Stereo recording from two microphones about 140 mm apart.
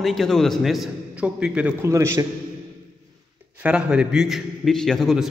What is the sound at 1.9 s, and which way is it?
Speech, 20° right (ahead or behind).